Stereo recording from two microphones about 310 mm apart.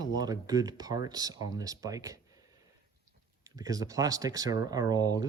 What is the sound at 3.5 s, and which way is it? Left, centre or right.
Speech, centre.